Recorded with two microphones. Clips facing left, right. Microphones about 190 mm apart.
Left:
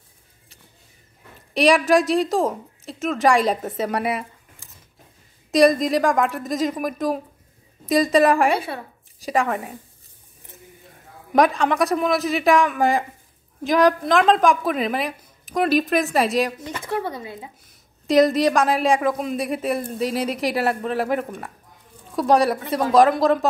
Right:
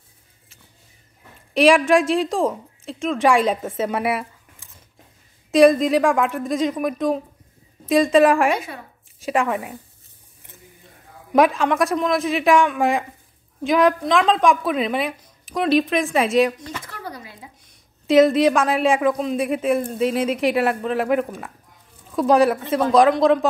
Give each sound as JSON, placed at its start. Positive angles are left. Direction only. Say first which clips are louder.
{"t": 1.5, "sound": "a woman's voice", "louder": "right 2 dB", "side_deg": 0}
{"t": 8.5, "sound": "speech", "louder": "left 1 dB", "side_deg": 30}
{"t": 9.2, "sound": "speech", "louder": "right 1 dB", "side_deg": 0}
{"t": 11.3, "sound": "speech", "louder": "right 1 dB", "side_deg": 0}
{"t": 16.6, "sound": "speech", "louder": "left 7 dB", "side_deg": 25}
{"t": 18.0, "sound": "speech", "louder": "right 2 dB", "side_deg": 0}